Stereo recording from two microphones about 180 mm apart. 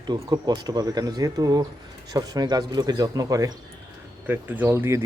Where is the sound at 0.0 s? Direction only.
25° right (ahead or behind).